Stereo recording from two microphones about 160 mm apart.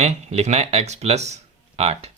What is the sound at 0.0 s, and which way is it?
Speech, 40° right (ahead or behind).